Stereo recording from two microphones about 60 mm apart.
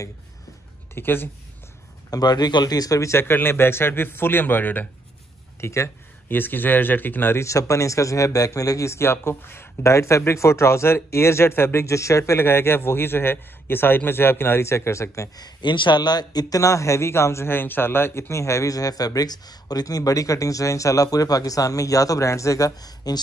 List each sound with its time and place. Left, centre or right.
0.9 s a man's voice: left
2.1 s speech: left
3.1 s a man's voice: left
5.6 s a sound: left
6.3 s a man's voice: left
7.3 s speech: left
9.9 s speech: left
16.3 s speech: left
18.3 s speech: left